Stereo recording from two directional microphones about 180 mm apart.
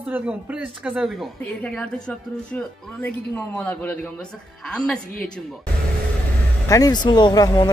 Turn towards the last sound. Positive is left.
turn(degrees=20)  # may be behind; listen again after turning